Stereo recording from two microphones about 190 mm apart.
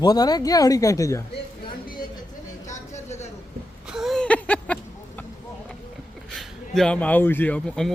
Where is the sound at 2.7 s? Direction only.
35° left (ahead or behind).